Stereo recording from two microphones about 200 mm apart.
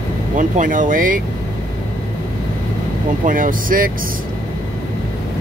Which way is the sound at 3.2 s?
45° right (ahead or behind).